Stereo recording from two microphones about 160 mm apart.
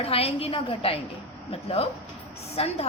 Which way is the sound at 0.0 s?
35° left (ahead or behind).